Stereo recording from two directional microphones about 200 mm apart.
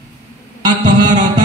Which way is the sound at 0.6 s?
20° right (ahead or behind).